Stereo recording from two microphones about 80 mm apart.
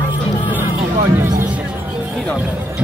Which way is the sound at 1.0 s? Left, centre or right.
Right.